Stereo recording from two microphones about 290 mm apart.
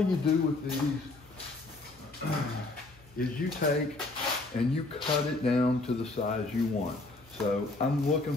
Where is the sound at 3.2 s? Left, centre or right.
Left.